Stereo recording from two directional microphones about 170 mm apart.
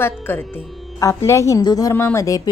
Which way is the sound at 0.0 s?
15° left (ahead or behind).